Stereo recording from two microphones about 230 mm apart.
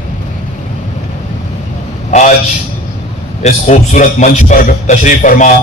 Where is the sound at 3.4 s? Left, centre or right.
Left.